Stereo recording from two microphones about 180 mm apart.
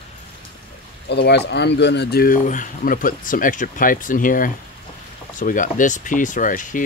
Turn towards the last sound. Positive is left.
turn(degrees=45)  # may be behind; listen again after turning